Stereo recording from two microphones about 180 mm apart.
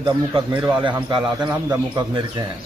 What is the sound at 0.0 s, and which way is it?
A man's voice, 25° right (ahead or behind).